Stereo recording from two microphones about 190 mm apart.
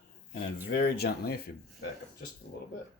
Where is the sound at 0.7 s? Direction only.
60° left (ahead or behind).